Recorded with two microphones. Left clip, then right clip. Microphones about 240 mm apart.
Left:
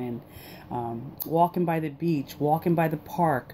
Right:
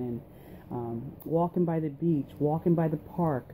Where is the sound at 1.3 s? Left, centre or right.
Left.